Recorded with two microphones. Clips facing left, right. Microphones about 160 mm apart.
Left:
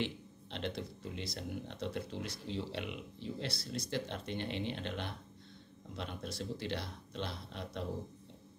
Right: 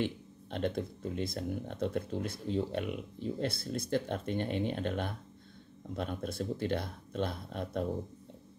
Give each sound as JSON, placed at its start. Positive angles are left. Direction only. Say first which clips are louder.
{"t": 0.0, "sound": "speech", "louder": "right 4 dB", "side_deg": -50}